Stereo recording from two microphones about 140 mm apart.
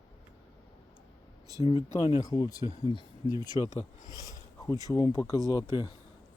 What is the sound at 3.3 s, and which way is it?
Speech, 35° right (ahead or behind).